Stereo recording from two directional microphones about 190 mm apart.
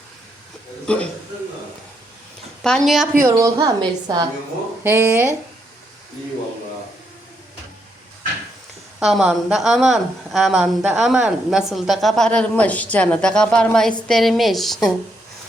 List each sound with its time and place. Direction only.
0.9 s a woman's voice: 5° left (ahead or behind)
2.6 s a woman's voice: centre (ahead or behind)
3.2 s a woman's voice: 15° right (ahead or behind)
9.0 s a woman's voice: centre (ahead or behind)